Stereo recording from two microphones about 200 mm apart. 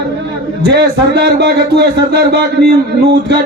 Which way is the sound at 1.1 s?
55° right (ahead or behind).